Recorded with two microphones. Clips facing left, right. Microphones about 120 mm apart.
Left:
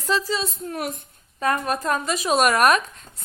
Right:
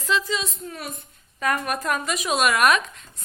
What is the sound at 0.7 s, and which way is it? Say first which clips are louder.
Speech: left 6 dB; 60° left (ahead or behind).